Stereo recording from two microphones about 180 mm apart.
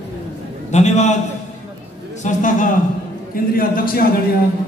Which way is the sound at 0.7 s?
40° left (ahead or behind).